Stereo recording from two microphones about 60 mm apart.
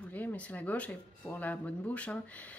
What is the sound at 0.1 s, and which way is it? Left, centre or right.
Speech, left.